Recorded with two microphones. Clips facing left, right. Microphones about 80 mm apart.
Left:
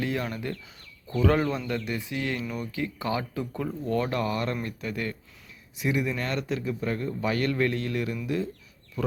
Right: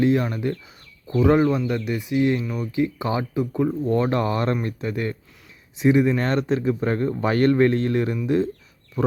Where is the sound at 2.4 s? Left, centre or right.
Centre.